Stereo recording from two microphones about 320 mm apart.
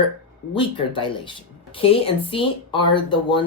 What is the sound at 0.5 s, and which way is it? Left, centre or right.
Speech, centre.